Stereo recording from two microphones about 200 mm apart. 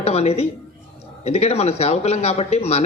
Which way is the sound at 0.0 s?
30° left (ahead or behind).